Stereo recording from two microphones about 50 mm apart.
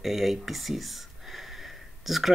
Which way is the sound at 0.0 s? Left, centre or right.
Centre.